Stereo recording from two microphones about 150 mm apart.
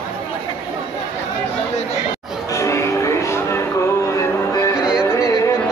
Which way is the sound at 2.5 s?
20° left (ahead or behind).